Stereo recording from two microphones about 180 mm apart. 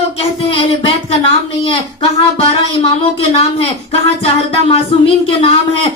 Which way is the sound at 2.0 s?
35° left (ahead or behind).